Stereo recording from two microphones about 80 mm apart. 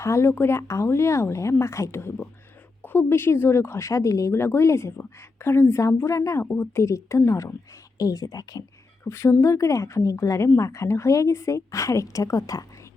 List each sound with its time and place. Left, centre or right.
0.0 s speech: left
6.4 s speech: left
7.9 s speech: left
9.0 s speech: left